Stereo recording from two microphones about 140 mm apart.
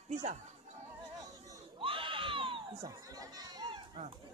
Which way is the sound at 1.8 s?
40° right (ahead or behind).